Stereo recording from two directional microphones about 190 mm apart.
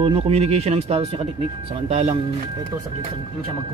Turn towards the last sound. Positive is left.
turn(degrees=-35)  # may be behind; listen again after turning